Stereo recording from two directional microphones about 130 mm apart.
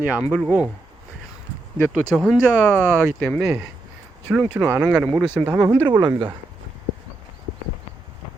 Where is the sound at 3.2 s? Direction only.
5° left (ahead or behind).